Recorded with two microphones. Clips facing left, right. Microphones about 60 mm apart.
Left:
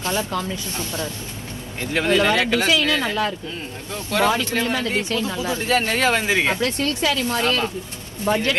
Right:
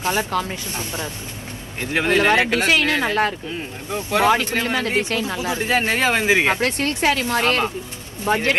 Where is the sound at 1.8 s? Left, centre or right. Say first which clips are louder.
Right 1 dB; right.